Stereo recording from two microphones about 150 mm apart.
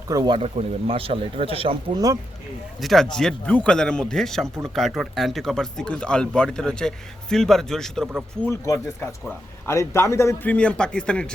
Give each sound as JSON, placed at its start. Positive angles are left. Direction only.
{"t": 0.1, "sound": "a man's voice", "side_deg": -25}
{"t": 0.3, "sound": "a man's voice", "side_deg": -40}
{"t": 2.8, "sound": "speech", "side_deg": 0}
{"t": 8.4, "sound": "a man's voice", "side_deg": 20}